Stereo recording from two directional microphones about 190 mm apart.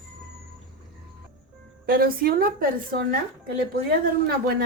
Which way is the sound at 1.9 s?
50° right (ahead or behind).